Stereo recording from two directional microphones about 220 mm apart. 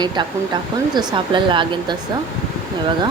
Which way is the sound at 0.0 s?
20° right (ahead or behind).